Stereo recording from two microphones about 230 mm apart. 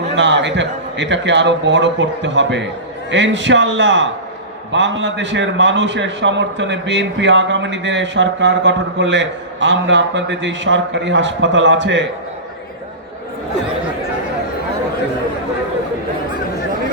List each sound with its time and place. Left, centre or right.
0.2 s a man's voice: right